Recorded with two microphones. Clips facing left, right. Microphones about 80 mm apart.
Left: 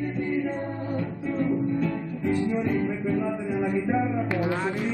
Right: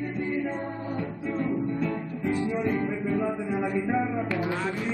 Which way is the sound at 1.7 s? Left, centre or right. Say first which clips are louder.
Left 2 dB; centre.